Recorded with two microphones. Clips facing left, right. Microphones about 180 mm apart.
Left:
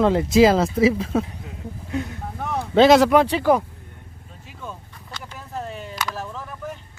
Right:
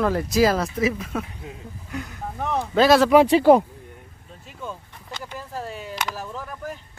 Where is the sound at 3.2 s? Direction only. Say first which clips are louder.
Right 4 dB; 25° right (ahead or behind).